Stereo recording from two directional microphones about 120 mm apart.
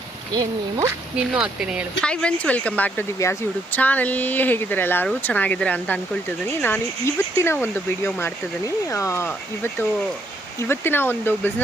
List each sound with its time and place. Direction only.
1.1 s speech: 5° right (ahead or behind)
2.0 s speech: 10° left (ahead or behind)
3.2 s speech: 25° left (ahead or behind)
3.8 s speech: 15° left (ahead or behind)
10.6 s speech: 20° left (ahead or behind)